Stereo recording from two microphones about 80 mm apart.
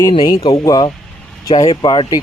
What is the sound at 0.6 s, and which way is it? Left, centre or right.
A man's voice, left.